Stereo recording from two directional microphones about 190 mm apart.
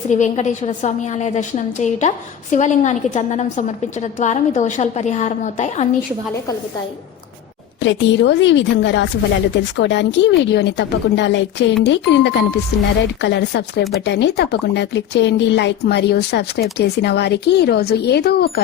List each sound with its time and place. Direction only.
0.1 s a woman's voice: 40° left (ahead or behind)
7.8 s a woman's voice: 70° left (ahead or behind)